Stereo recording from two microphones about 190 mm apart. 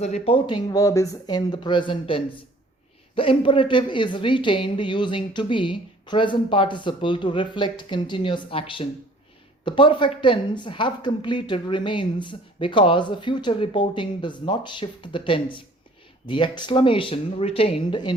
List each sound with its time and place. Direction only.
0.0 s speech: 35° left (ahead or behind)